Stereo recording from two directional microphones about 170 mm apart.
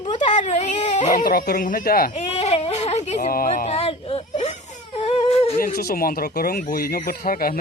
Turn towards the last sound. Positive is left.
turn(degrees=60)  # may be behind; listen again after turning